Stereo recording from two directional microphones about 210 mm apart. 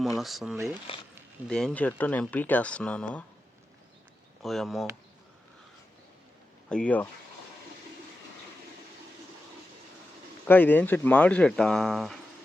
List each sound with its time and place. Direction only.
0.2 s speech: centre (ahead or behind)
0.9 s speech: 25° left (ahead or behind)
1.5 s speech: 5° left (ahead or behind)
4.4 s speech: centre (ahead or behind)
6.7 s speech: 5° left (ahead or behind)
10.4 s speech: 10° left (ahead or behind)